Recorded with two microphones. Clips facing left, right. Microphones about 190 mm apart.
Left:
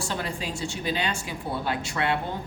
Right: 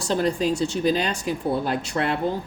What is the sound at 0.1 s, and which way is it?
Speech, 40° right (ahead or behind).